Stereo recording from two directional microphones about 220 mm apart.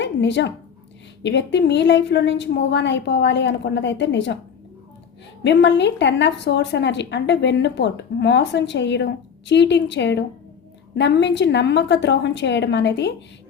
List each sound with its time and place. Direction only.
0.0 s a woman's voice: 55° left (ahead or behind)
5.4 s a woman's voice: 55° left (ahead or behind)